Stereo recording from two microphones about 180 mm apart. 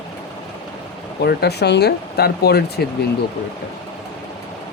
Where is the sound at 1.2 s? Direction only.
65° left (ahead or behind).